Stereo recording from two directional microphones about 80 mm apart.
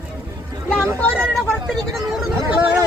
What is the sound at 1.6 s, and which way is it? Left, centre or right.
Speech, centre.